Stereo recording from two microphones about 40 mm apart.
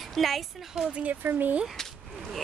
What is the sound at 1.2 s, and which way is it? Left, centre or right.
Speech, right.